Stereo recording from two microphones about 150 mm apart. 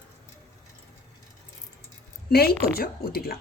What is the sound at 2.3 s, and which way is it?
Speech, 90° left.